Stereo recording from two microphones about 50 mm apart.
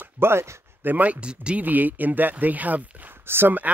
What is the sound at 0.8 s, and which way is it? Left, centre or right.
Speech, right.